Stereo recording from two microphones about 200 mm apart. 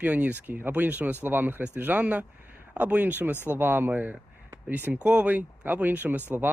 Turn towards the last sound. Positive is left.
turn(degrees=-10)  # may be behind; listen again after turning